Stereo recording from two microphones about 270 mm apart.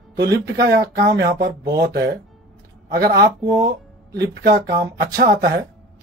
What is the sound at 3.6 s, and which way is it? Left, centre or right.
Music, centre.